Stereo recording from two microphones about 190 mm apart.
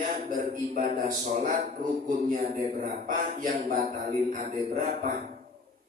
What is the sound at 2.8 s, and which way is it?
Speech, 50° right (ahead or behind).